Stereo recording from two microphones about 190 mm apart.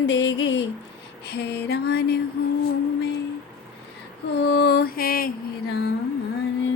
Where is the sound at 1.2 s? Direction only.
60° left (ahead or behind).